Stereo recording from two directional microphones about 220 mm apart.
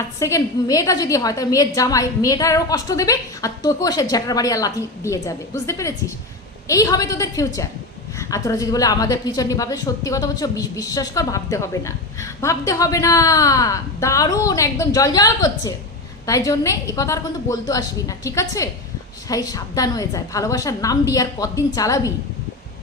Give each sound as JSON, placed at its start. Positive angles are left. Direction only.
{"t": 0.2, "sound": "a woman's voice", "side_deg": 15}